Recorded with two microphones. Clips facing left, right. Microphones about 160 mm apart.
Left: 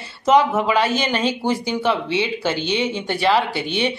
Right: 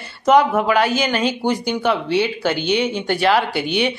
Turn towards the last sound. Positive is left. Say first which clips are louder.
# right 2 dB
turn(degrees=0)  # may be behind; listen again after turning